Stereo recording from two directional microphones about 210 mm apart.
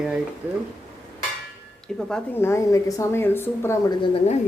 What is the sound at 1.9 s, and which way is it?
A woman's voice, 5° left (ahead or behind).